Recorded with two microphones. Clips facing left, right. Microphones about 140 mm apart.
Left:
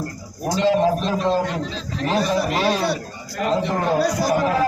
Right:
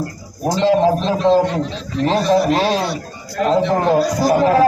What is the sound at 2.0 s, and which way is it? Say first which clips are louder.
A man's voice: right 6 dB; 30° right (ahead or behind).